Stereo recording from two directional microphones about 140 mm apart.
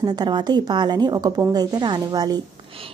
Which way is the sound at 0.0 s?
30° right (ahead or behind).